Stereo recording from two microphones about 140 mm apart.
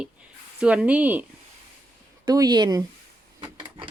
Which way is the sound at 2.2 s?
25° right (ahead or behind).